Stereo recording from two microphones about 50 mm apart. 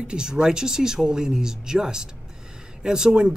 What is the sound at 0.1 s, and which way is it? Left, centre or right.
Speech, centre.